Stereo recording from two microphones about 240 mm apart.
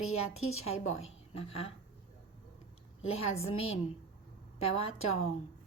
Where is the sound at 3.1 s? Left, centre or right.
Left.